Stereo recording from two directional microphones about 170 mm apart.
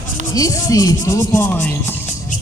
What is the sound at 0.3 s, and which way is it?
Speech, 20° left (ahead or behind).